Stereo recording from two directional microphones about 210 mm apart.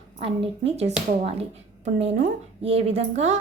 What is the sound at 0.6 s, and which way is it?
A woman's voice, 30° right (ahead or behind).